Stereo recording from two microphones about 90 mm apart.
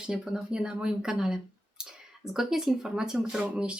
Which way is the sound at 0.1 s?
10° right (ahead or behind).